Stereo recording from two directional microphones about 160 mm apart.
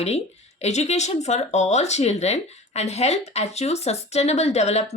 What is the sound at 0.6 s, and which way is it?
A woman's voice, 45° left (ahead or behind).